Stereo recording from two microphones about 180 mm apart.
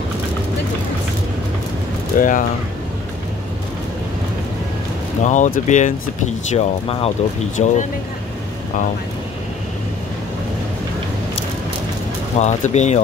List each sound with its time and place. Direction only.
2.1 s speech: 45° left (ahead or behind)
5.2 s speech: 45° left (ahead or behind)
6.5 s speech: 35° left (ahead or behind)
12.4 s speech: 40° left (ahead or behind)